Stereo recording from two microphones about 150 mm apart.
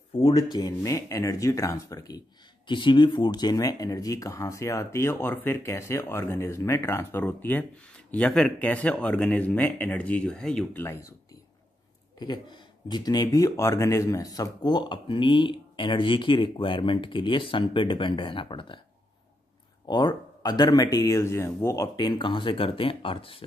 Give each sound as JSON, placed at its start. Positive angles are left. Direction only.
{"t": 0.2, "sound": "speech", "side_deg": 25}
{"t": 10.8, "sound": "speech", "side_deg": 20}
{"t": 12.2, "sound": "speech", "side_deg": 30}
{"t": 19.9, "sound": "speech", "side_deg": 30}